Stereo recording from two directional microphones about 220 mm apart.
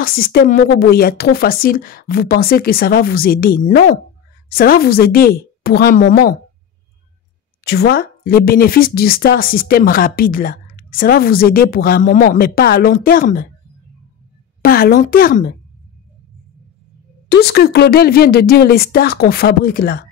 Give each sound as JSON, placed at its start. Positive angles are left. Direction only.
{"t": 0.0, "sound": "speech", "side_deg": 45}
{"t": 7.6, "sound": "speech", "side_deg": 45}
{"t": 14.6, "sound": "speech", "side_deg": 40}
{"t": 17.3, "sound": "speech", "side_deg": 45}